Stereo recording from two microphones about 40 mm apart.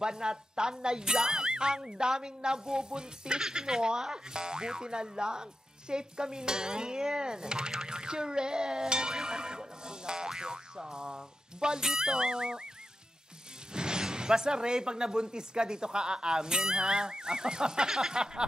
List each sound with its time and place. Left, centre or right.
0.0 s speech: centre
13.7 s speech: centre